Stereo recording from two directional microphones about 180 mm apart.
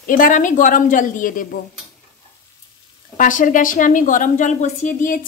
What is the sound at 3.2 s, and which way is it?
Speech, 45° left (ahead or behind).